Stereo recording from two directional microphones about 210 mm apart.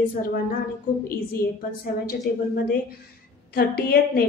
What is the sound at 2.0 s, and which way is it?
A woman's voice, 45° left (ahead or behind).